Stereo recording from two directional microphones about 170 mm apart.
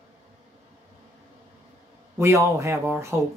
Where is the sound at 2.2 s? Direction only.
15° right (ahead or behind).